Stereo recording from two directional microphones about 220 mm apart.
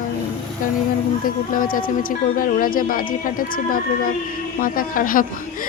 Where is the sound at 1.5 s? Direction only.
40° left (ahead or behind).